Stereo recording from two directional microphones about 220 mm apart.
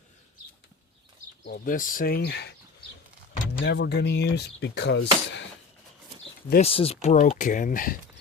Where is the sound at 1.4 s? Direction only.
45° left (ahead or behind).